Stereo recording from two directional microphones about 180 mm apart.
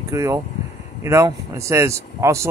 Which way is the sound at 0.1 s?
15° right (ahead or behind).